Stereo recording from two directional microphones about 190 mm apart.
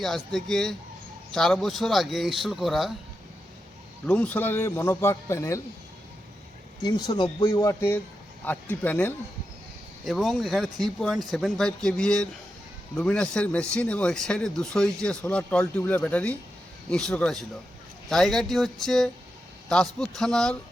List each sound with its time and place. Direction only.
0.0 s speech: centre (ahead or behind)
4.0 s a man's voice: 10° left (ahead or behind)
6.8 s a man's voice: 20° left (ahead or behind)
10.0 s speech: centre (ahead or behind)